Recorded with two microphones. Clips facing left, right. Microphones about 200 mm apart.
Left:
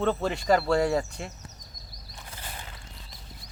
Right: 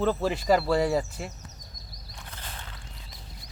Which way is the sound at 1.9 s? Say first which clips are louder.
Even; 10° left (ahead or behind).